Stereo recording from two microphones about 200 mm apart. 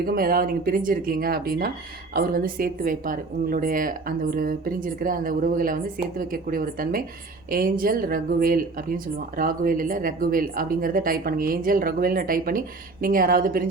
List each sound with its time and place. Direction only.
0.0 s speech: 45° right (ahead or behind)